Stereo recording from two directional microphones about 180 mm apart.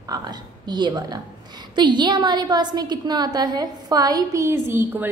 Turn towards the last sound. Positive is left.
turn(degrees=-10)  # may be behind; listen again after turning